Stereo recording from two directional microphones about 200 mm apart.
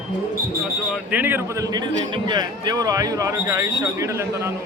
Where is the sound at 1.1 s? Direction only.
10° right (ahead or behind).